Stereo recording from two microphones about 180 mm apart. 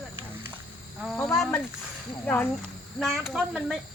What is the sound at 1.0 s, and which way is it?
Speech, centre (ahead or behind).